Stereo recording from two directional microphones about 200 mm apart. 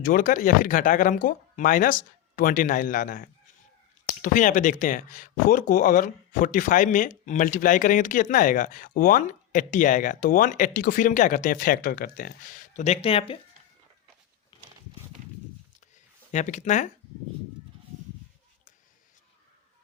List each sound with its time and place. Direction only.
0.0 s speech: 45° left (ahead or behind)
14.5 s a sound: 25° left (ahead or behind)
16.3 s speech: 35° left (ahead or behind)